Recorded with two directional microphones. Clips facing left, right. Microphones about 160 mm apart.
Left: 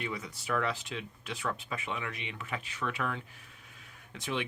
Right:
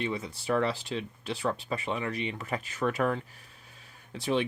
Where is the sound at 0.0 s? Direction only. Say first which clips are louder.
Right 5 dB; 25° right (ahead or behind).